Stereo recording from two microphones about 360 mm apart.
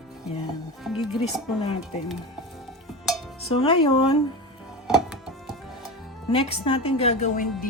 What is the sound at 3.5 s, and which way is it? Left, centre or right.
Speech, centre.